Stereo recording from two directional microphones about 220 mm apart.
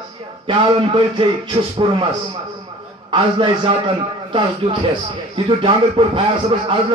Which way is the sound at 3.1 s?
20° right (ahead or behind).